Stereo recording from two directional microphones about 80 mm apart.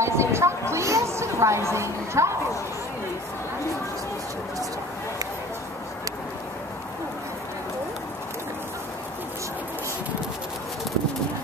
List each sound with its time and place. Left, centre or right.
0.0 s speech: right